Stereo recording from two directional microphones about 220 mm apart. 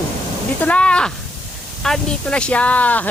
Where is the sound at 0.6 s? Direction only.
5° left (ahead or behind).